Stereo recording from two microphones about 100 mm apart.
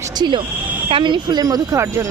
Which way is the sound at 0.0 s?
45° right (ahead or behind).